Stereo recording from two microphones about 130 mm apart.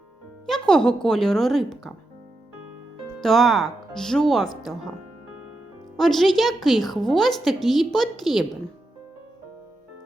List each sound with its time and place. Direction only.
0.4 s a woman's voice: 5° left (ahead or behind)
3.2 s a woman's voice: centre (ahead or behind)
6.0 s a woman's voice: centre (ahead or behind)